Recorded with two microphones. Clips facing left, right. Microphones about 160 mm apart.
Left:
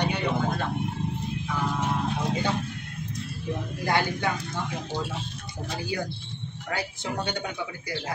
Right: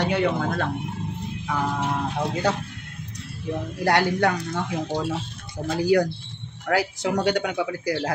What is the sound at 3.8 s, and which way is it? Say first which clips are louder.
Speech: right 6 dB; 75° right (ahead or behind).